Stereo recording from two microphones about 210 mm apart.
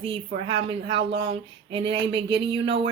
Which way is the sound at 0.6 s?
25° right (ahead or behind).